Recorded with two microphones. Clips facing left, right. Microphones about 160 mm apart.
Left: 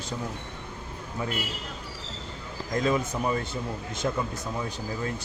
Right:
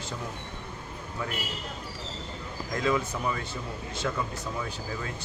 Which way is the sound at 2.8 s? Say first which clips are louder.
Left 1 dB; 25° left (ahead or behind).